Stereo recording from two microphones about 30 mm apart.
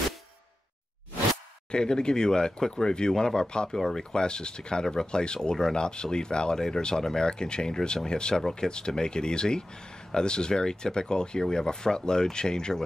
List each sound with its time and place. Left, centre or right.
1.7 s speech: left
7.2 s speech: left